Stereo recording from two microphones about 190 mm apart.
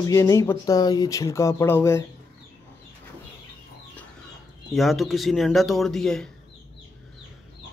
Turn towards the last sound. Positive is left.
turn(degrees=5)  # may be behind; listen again after turning